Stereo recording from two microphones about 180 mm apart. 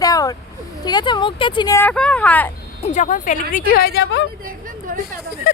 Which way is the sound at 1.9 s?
5° left (ahead or behind).